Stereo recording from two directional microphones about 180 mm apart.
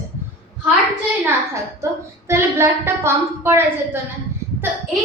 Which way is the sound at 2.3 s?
15° right (ahead or behind).